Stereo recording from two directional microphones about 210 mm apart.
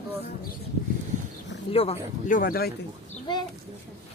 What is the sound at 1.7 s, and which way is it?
Speech, 30° left (ahead or behind).